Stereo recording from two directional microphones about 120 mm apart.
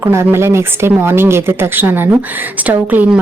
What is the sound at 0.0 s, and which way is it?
A woman's voice, 20° right (ahead or behind).